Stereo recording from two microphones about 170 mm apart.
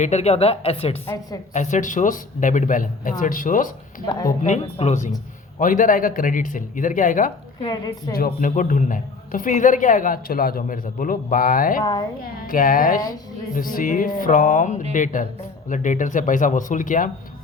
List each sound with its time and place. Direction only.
0.0 s a woman's voice: 40° left (ahead or behind)
1.0 s a woman's voice: 20° left (ahead or behind)
1.5 s a man's voice: 45° left (ahead or behind)
4.0 s a woman's voice: 20° left (ahead or behind)
4.3 s a man's voice: 45° left (ahead or behind)
7.6 s a woman's voice: 25° left (ahead or behind)
8.1 s a man's voice: 55° left (ahead or behind)
11.8 s a woman's voice: 25° left (ahead or behind)
12.2 s a woman's voice: 55° left (ahead or behind)